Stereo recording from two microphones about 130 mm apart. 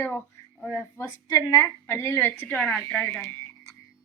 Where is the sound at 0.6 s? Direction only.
20° left (ahead or behind).